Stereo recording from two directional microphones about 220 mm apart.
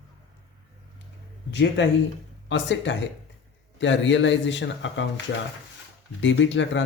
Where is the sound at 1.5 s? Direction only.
55° left (ahead or behind).